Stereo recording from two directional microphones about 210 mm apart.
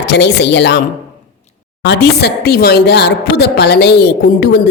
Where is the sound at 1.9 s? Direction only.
50° left (ahead or behind).